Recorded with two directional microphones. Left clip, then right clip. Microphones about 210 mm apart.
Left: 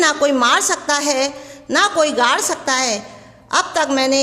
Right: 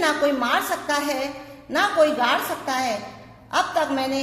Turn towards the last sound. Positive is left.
turn(degrees=50)  # may be behind; listen again after turning